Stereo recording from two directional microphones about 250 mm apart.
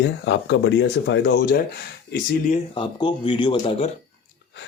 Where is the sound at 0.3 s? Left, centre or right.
Left.